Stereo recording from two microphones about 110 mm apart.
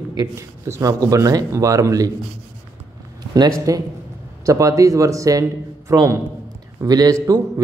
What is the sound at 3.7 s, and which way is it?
A man's voice, 30° right (ahead or behind).